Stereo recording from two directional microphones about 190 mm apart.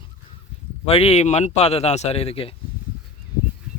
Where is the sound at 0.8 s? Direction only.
30° left (ahead or behind).